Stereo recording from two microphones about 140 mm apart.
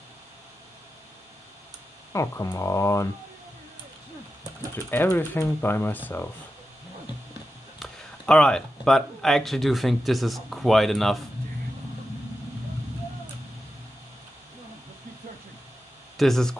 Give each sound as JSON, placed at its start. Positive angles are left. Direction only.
{"t": 2.1, "sound": "speech", "side_deg": 20}
{"t": 4.7, "sound": "speech", "side_deg": 15}
{"t": 7.8, "sound": "speech", "side_deg": 5}
{"t": 16.2, "sound": "speech", "side_deg": 5}